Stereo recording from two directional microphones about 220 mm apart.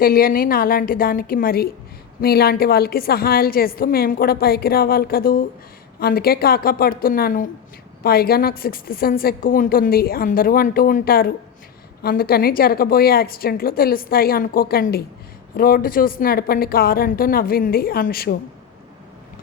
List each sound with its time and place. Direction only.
0.0 s a woman's voice: 40° left (ahead or behind)